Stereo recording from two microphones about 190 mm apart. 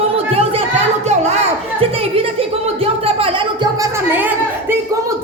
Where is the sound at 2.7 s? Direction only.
30° right (ahead or behind).